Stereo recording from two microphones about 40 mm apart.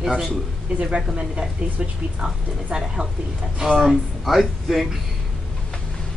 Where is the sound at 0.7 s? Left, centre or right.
Right; by 4.8 s centre.